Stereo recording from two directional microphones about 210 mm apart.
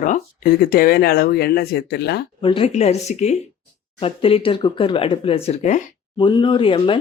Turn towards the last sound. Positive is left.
turn(degrees=25)  # may be behind; listen again after turning